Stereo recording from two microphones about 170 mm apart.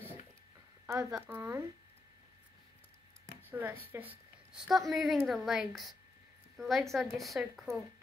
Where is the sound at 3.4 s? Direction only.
10° right (ahead or behind).